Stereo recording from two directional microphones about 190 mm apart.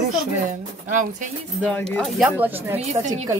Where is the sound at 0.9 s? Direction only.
45° right (ahead or behind).